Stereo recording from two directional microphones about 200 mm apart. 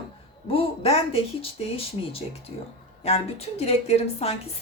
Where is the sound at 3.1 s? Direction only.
30° left (ahead or behind).